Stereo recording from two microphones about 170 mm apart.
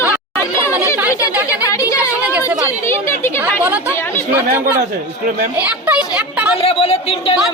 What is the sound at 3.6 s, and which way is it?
Speech, 10° right (ahead or behind).